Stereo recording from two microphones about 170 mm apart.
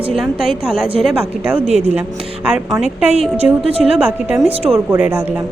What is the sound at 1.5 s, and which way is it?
Speech, 40° right (ahead or behind).